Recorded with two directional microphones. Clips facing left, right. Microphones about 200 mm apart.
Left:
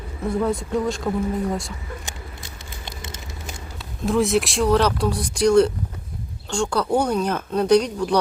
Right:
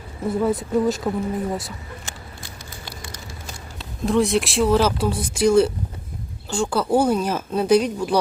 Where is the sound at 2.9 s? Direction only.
20° left (ahead or behind).